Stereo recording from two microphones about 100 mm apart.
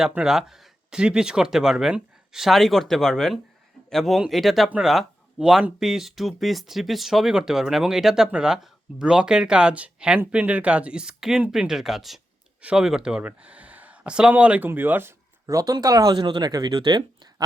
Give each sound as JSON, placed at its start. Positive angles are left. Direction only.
{"t": 0.1, "sound": "speech", "side_deg": -5}
{"t": 15.4, "sound": "speech", "side_deg": -40}